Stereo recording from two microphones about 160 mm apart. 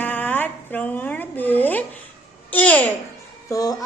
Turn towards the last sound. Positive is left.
turn(degrees=20)  # may be behind; listen again after turning